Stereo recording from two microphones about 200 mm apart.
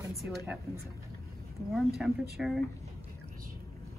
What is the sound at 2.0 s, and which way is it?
Speech, centre (ahead or behind).